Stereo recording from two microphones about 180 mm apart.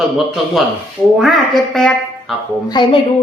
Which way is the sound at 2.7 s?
25° left (ahead or behind).